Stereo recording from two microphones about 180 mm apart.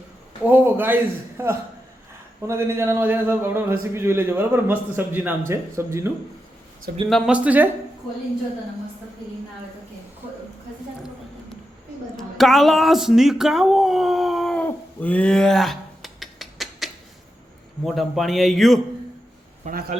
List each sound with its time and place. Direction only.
0.4 s a man's voice: 10° right (ahead or behind)
7.1 s a man's voice: centre (ahead or behind)
12.1 s a sound: centre (ahead or behind)
17.8 s a man's voice: centre (ahead or behind)
19.6 s a man's voice: 45° right (ahead or behind)